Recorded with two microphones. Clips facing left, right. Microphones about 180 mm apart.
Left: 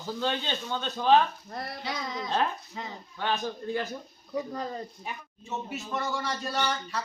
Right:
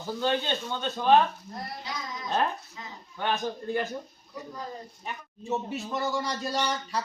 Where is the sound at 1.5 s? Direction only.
65° left (ahead or behind).